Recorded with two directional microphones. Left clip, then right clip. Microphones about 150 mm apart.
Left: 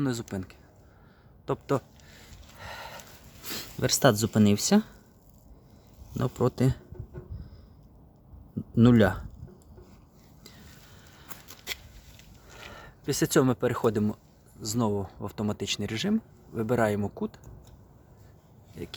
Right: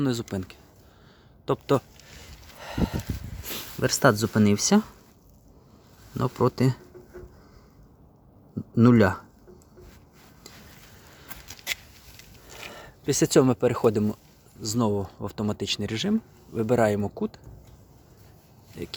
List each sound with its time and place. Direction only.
0.0 s speech: 20° right (ahead or behind)
2.0 s sniff: 35° right (ahead or behind)
3.4 s speech: centre (ahead or behind)
6.1 s speech: 10° right (ahead or behind)
8.7 s speech: centre (ahead or behind)
11.3 s patter: 75° right (ahead or behind)
12.5 s speech: 25° right (ahead or behind)
18.8 s speech: 15° right (ahead or behind)